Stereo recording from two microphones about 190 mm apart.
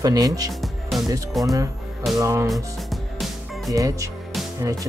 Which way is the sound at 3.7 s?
20° right (ahead or behind).